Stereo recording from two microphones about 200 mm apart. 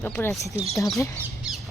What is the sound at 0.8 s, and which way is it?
Speech, centre (ahead or behind).